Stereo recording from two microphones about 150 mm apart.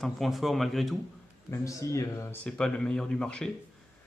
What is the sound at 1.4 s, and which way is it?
Speech, 20° left (ahead or behind).